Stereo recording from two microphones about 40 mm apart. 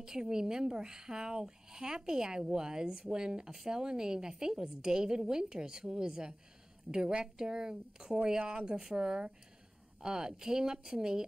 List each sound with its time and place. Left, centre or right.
0.0 s speech: centre